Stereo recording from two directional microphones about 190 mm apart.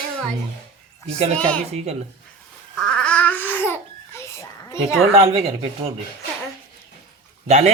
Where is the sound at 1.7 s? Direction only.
35° right (ahead or behind).